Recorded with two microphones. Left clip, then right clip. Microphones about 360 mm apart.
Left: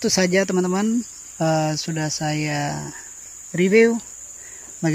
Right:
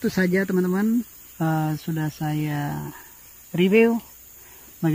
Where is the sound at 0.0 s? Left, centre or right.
Centre.